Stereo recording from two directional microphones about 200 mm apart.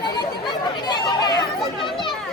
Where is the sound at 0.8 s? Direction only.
20° left (ahead or behind).